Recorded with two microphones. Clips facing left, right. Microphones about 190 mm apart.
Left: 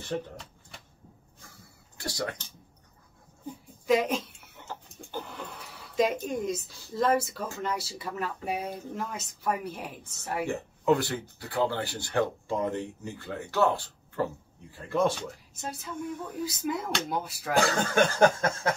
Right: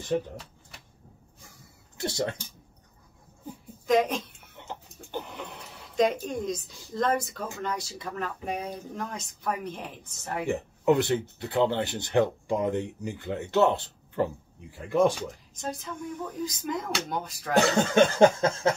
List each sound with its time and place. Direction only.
2.0 s speech: 25° right (ahead or behind)
3.8 s speech: 5° left (ahead or behind)
4.6 s a sound: 20° right (ahead or behind)
5.9 s speech: 5° left (ahead or behind)
10.4 s speech: 20° right (ahead or behind)
15.5 s speech: 10° left (ahead or behind)
17.6 s speech: 20° right (ahead or behind)